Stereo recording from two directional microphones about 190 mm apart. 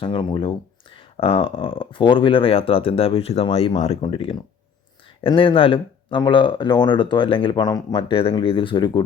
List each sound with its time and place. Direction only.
0.0 s speech: 25° left (ahead or behind)